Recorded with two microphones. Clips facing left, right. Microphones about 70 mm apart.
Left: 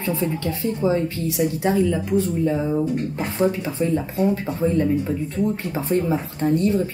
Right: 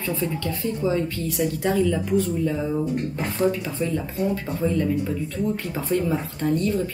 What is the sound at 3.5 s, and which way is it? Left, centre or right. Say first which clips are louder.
Speech: left 3 dB; left.